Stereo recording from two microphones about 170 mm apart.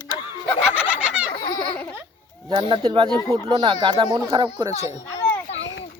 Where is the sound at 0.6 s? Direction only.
5° right (ahead or behind).